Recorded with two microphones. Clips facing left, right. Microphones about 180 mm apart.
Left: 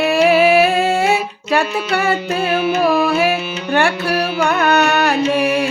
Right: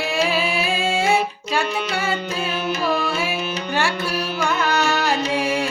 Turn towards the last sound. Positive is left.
turn(degrees=65)  # may be behind; listen again after turning